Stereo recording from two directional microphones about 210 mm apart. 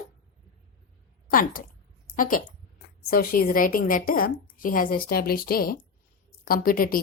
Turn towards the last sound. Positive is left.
turn(degrees=40)  # may be behind; listen again after turning